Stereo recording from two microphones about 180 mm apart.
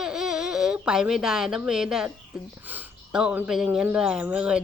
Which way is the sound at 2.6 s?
10° right (ahead or behind).